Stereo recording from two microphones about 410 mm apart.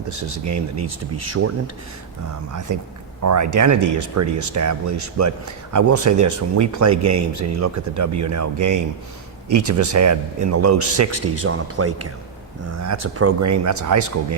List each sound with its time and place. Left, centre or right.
0.1 s speech: right